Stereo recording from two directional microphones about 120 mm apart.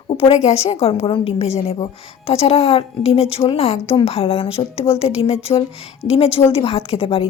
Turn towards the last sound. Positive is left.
turn(degrees=50)  # may be behind; listen again after turning